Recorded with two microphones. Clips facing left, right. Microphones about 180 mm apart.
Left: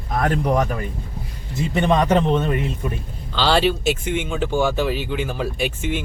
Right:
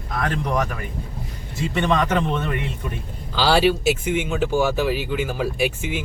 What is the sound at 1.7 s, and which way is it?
Speech, 40° left (ahead or behind).